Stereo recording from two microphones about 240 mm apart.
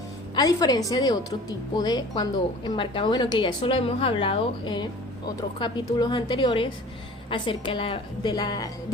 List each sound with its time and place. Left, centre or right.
0.3 s a woman's voice: centre